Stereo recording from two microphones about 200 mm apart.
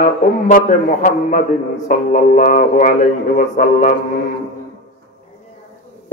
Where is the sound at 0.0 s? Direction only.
45° left (ahead or behind).